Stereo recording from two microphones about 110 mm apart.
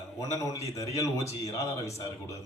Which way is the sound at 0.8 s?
30° left (ahead or behind).